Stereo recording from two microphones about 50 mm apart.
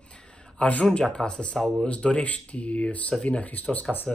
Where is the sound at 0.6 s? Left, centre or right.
Left.